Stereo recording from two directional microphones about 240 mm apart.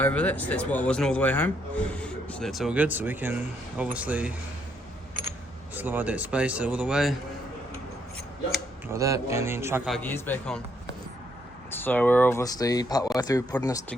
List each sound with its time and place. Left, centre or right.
0.0 s speech: centre
5.7 s speech: centre
8.9 s a man's voice: centre
11.7 s speech: centre